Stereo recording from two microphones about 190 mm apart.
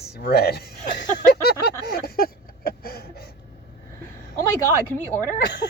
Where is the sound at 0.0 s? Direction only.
55° left (ahead or behind).